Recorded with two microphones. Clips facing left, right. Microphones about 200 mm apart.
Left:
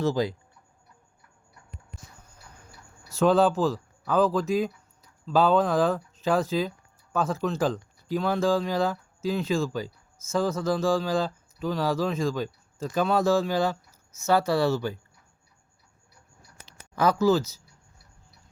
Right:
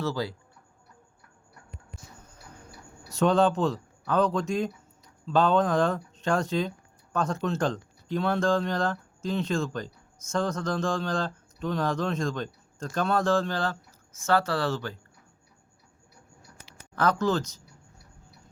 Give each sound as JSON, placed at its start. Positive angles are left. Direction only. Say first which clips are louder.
{"t": 0.0, "sound": "speech", "louder": "left 5 dB", "side_deg": 20}
{"t": 3.1, "sound": "speech", "louder": "left 2 dB", "side_deg": 0}
{"t": 16.9, "sound": "speech", "louder": "left 4 dB", "side_deg": 10}